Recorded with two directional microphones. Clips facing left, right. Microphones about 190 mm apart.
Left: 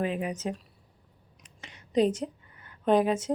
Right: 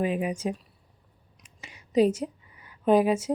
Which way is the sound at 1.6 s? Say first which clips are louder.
Right 3 dB; 10° right (ahead or behind).